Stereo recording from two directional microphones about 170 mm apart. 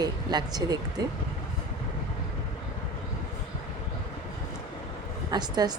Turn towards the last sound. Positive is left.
turn(degrees=-25)  # may be behind; listen again after turning